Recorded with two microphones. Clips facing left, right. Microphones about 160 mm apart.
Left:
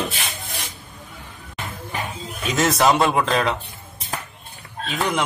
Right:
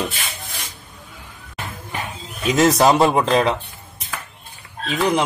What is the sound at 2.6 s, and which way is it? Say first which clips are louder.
Music: right 3 dB; 35° right (ahead or behind).